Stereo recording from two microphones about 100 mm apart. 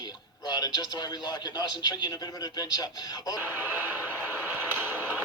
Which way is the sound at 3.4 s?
20° right (ahead or behind).